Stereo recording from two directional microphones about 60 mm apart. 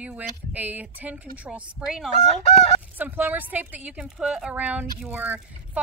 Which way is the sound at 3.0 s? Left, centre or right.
Right.